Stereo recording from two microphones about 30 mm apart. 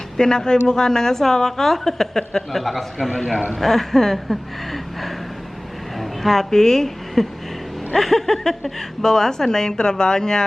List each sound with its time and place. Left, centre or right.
0.2 s a woman's voice: left
2.5 s speech: centre
6.0 s a sound: centre
6.5 s a woman's voice: centre